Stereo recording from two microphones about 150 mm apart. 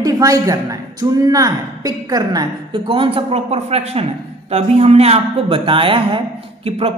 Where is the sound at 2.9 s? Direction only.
40° right (ahead or behind).